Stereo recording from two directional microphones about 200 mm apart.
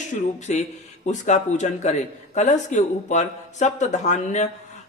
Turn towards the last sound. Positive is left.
turn(degrees=35)  # may be behind; listen again after turning